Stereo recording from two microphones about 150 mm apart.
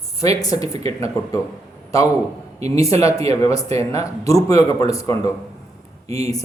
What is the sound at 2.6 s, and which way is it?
Speech, 20° left (ahead or behind).